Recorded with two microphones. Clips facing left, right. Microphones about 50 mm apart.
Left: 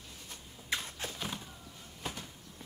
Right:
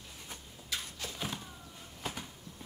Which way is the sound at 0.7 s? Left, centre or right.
Left.